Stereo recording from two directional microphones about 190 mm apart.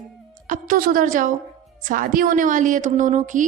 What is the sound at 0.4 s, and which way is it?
A woman's voice, 40° right (ahead or behind).